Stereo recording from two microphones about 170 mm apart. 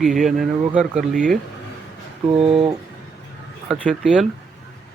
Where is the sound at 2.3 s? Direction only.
35° right (ahead or behind).